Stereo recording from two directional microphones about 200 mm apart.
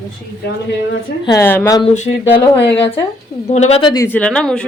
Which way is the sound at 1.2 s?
15° left (ahead or behind).